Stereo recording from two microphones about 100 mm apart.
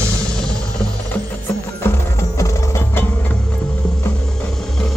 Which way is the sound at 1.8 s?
25° left (ahead or behind).